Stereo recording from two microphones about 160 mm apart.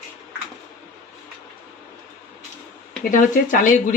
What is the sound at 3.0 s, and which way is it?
Speech, 55° left (ahead or behind).